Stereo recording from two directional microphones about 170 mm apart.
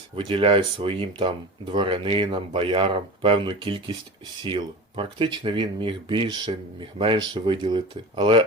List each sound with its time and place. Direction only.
0.3 s speech: 30° right (ahead or behind)